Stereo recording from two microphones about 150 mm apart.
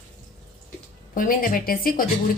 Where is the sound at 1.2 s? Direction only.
70° left (ahead or behind).